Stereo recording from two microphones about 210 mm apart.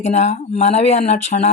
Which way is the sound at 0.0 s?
30° left (ahead or behind).